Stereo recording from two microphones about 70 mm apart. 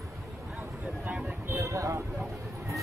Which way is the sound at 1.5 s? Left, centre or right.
Right.